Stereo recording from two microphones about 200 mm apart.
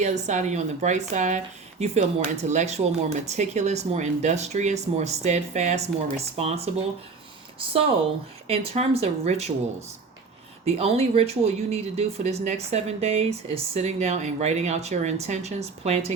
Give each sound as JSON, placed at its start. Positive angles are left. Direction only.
{"t": 0.0, "sound": "speech", "side_deg": -35}
{"t": 8.4, "sound": "speech", "side_deg": -30}
{"t": 10.7, "sound": "speech", "side_deg": -30}